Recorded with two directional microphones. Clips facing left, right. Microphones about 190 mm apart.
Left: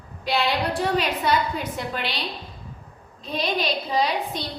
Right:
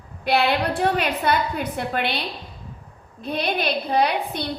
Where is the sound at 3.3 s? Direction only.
60° right (ahead or behind).